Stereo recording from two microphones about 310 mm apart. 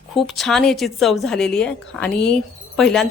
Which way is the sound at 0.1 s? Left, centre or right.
Centre.